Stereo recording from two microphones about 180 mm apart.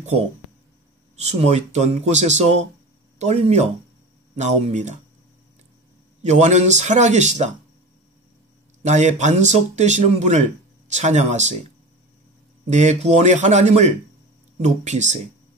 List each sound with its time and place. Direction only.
1.1 s speech: 35° right (ahead or behind)
6.2 s speech: 40° right (ahead or behind)
8.8 s speech: 40° right (ahead or behind)
12.6 s speech: 40° right (ahead or behind)